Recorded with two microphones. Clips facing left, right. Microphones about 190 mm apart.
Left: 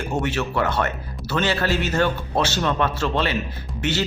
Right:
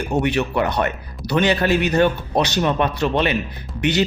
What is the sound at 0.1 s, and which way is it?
A man's voice, 20° right (ahead or behind).